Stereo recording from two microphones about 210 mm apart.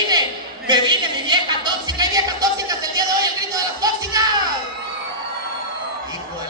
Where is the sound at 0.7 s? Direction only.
20° right (ahead or behind).